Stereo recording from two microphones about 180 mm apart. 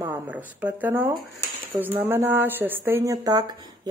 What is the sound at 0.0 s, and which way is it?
Speech, 10° right (ahead or behind).